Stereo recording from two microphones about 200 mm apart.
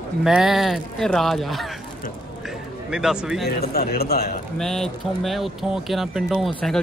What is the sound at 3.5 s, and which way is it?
Speech, 50° left (ahead or behind).